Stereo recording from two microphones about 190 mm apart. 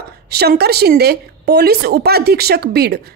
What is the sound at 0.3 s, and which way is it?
Speech, 55° right (ahead or behind).